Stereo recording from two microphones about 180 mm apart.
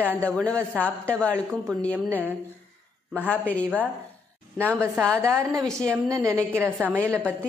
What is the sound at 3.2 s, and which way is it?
Speech, 10° left (ahead or behind).